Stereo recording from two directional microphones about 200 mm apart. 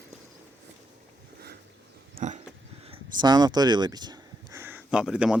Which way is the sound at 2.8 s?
25° right (ahead or behind).